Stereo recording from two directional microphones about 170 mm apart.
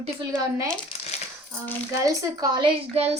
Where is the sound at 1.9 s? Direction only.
20° right (ahead or behind); by 3.2 s 35° right (ahead or behind).